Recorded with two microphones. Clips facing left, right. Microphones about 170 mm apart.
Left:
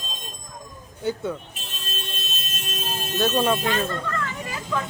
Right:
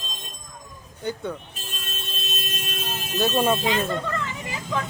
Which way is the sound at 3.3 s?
15° right (ahead or behind).